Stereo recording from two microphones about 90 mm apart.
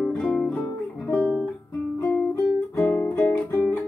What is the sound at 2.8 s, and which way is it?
Music, 15° left (ahead or behind).